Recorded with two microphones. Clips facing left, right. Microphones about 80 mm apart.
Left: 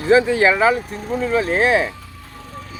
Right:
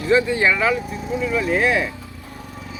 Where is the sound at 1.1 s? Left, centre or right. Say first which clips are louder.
Left 2 dB; left.